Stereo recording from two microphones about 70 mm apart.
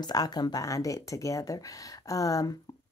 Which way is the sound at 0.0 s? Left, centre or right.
Left.